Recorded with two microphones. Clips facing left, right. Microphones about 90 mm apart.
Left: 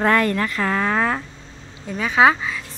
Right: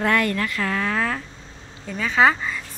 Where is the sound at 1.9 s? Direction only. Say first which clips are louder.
Left 2 dB; 15° left (ahead or behind).